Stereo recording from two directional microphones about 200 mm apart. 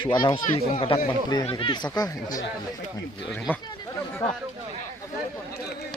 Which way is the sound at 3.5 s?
5° right (ahead or behind).